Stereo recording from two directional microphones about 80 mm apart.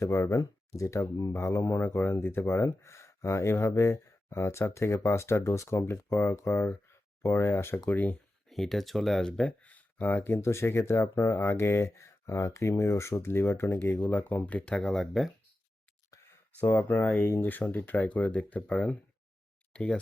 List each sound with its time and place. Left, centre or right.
0.0 s speech: left
7.9 s speech: centre
8.4 s speech: centre
9.4 s speech: centre
10.4 s speech: left
14.1 s speech: centre
16.6 s speech: left